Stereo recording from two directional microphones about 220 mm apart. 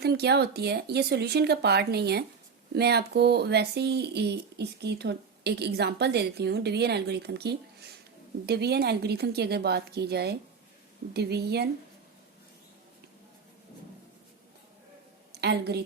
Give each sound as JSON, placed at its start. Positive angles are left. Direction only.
{"t": 0.0, "sound": "speech", "side_deg": -45}
{"t": 15.3, "sound": "a woman's voice", "side_deg": -50}